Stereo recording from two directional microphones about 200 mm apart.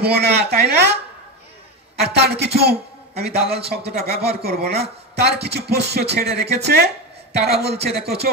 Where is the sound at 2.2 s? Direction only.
55° right (ahead or behind).